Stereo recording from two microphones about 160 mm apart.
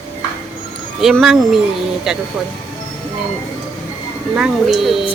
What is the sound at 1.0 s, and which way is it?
Speech, centre (ahead or behind).